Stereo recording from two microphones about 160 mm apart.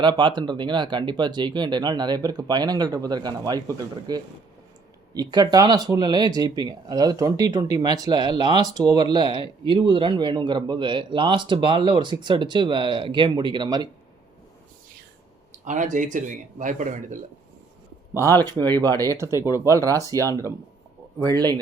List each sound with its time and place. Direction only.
0.0 s speech: 30° right (ahead or behind)
15.6 s speech: 50° right (ahead or behind)
18.1 s speech: 15° left (ahead or behind)
19.0 s speech: 15° right (ahead or behind)
20.1 s speech: 20° left (ahead or behind)
21.3 s speech: 25° right (ahead or behind)